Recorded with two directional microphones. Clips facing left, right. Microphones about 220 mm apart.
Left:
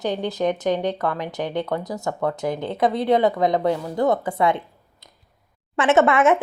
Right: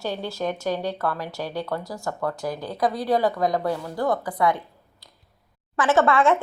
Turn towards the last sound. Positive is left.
turn(degrees=20)  # may be behind; listen again after turning